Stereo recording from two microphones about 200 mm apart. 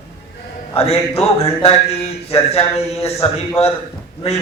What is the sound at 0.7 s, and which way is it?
A man's voice, 30° left (ahead or behind).